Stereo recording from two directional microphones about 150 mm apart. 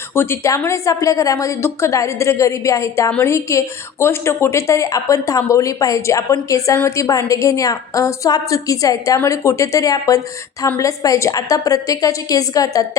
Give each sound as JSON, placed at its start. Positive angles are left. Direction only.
{"t": 0.1, "sound": "a woman's voice", "side_deg": 15}